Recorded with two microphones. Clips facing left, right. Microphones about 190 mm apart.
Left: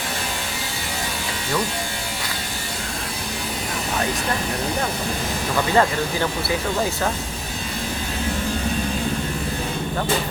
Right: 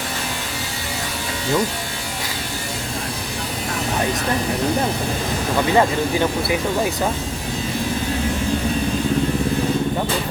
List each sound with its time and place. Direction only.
5.7 s speech: 15° right (ahead or behind)